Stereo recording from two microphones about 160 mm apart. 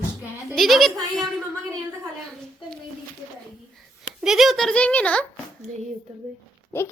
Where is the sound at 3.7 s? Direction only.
Centre (ahead or behind).